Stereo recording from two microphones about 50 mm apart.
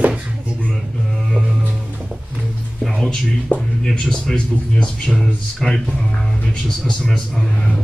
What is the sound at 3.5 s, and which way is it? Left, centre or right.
Speech, left.